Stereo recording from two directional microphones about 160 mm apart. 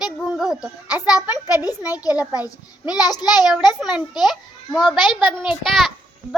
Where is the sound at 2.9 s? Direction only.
25° left (ahead or behind).